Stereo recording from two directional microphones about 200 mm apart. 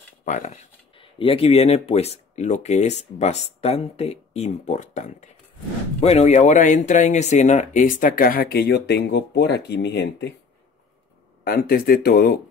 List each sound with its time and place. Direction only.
0.2 s speech: 40° left (ahead or behind); by 10.3 s 55° left (ahead or behind)
11.4 s speech: 45° left (ahead or behind)